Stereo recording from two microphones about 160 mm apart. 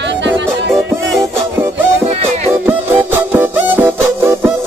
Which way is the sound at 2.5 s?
10° right (ahead or behind).